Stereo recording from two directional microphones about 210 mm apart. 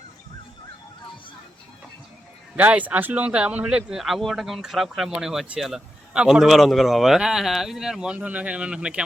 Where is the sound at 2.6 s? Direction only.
5° right (ahead or behind).